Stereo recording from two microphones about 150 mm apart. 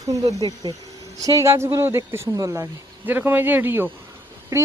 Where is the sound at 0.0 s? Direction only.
20° right (ahead or behind).